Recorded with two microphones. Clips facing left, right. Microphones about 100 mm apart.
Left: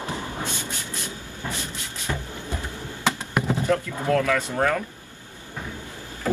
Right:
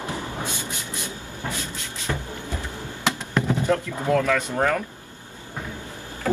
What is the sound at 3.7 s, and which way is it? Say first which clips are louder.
Speech: right 1 dB; 15° right (ahead or behind).